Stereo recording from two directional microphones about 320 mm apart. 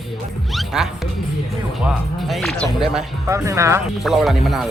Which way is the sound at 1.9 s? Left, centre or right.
Centre.